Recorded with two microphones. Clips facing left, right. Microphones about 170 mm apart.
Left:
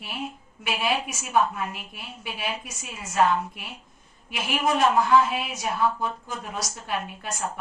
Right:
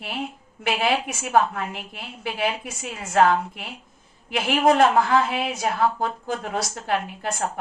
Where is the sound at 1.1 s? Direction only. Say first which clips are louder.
Right 3 dB; 60° right (ahead or behind).